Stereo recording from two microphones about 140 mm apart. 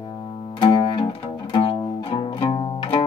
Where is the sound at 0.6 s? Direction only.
35° left (ahead or behind).